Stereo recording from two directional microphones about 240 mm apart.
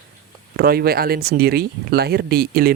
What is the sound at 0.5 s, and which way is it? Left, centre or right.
Speech, right.